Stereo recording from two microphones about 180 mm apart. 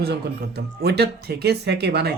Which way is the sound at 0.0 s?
60° right (ahead or behind).